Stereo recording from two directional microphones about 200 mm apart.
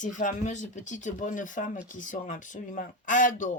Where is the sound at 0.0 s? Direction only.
40° left (ahead or behind).